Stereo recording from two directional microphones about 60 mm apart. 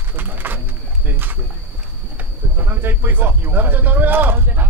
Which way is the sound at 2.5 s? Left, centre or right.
Right.